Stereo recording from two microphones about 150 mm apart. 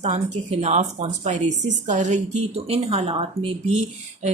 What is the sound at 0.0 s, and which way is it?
A woman's voice, 45° right (ahead or behind).